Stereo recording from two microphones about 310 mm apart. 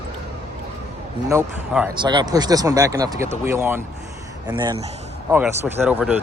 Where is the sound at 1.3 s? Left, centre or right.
Centre.